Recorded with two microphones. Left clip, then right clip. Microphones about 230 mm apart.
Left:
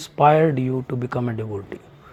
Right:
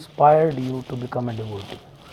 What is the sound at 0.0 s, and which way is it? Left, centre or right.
Speech, left.